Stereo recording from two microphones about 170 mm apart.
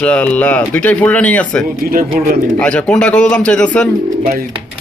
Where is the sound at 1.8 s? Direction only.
55° right (ahead or behind).